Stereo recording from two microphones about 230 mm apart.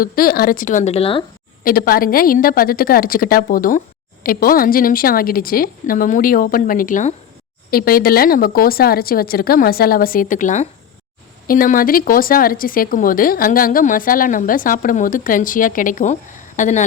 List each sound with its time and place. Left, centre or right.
0.0 s a woman's voice: left
1.6 s a woman's voice: left